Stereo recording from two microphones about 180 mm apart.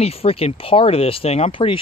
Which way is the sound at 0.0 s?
35° left (ahead or behind).